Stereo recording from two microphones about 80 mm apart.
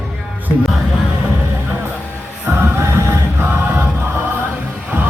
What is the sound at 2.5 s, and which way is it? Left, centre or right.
Music, right.